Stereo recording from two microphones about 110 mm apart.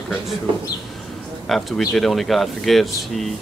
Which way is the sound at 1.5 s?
Centre (ahead or behind).